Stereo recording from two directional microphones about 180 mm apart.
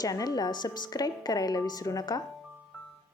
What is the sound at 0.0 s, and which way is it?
A woman's voice, 20° left (ahead or behind).